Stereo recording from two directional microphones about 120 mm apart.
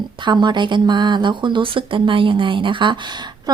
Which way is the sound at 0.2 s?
40° right (ahead or behind).